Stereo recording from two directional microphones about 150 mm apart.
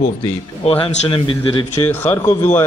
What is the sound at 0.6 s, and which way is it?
A man's voice, 40° left (ahead or behind).